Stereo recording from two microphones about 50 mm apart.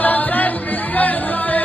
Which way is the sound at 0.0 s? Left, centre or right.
Left.